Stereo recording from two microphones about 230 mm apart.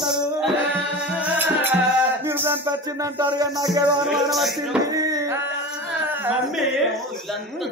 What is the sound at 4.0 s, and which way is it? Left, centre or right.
Speech, centre.